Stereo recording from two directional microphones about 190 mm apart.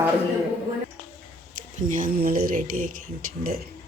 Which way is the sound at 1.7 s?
45° right (ahead or behind).